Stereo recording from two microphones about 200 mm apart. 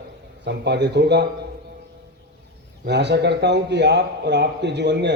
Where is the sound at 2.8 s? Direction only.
60° right (ahead or behind).